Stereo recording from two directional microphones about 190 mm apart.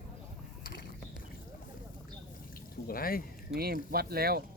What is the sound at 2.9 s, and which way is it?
Speech, 50° left (ahead or behind).